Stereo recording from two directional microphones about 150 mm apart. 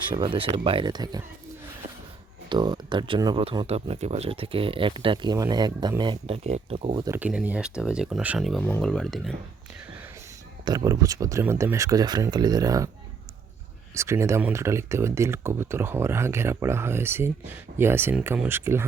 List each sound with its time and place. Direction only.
0.1 s speech: 35° right (ahead or behind)
2.5 s speech: 30° right (ahead or behind)
3.7 s speech: 45° right (ahead or behind)
7.2 s speech: 10° right (ahead or behind)
10.7 s speech: 25° right (ahead or behind)
13.9 s speech: 20° right (ahead or behind)